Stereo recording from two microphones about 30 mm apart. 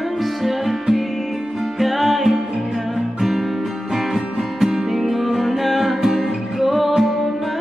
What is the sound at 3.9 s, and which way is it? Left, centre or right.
Music, centre.